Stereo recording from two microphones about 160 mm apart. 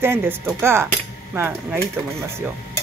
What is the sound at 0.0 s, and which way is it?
Speech, 15° right (ahead or behind).